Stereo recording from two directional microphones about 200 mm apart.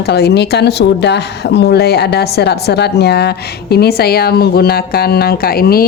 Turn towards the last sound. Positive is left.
turn(degrees=50)  # may be behind; listen again after turning